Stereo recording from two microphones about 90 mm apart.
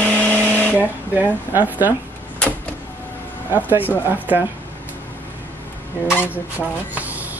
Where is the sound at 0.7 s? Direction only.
20° right (ahead or behind).